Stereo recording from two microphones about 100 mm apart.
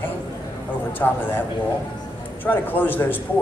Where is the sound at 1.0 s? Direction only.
25° left (ahead or behind).